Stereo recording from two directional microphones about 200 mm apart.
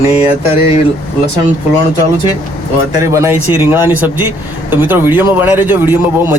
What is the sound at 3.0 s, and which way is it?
Speech, 15° right (ahead or behind).